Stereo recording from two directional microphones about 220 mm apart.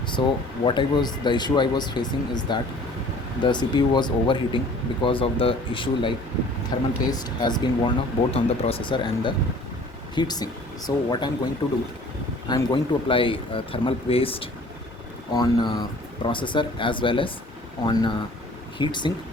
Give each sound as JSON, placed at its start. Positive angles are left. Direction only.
{"t": 0.2, "sound": "speech", "side_deg": 25}
{"t": 12.5, "sound": "speech", "side_deg": 20}